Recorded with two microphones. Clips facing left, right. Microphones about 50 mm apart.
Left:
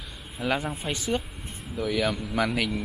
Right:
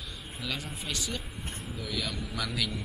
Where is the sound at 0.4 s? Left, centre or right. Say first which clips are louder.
Left 9 dB; left.